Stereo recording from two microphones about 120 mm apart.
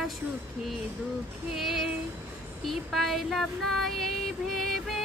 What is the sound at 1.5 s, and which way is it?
Female singing, centre (ahead or behind).